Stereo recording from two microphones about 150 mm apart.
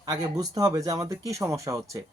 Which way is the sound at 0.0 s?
25° right (ahead or behind).